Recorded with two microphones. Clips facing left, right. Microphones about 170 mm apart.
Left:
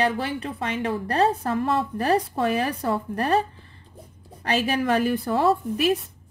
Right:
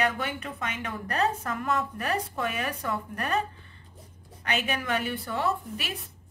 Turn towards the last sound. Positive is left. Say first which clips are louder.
# left 10 dB
turn(degrees=35)  # may be behind; listen again after turning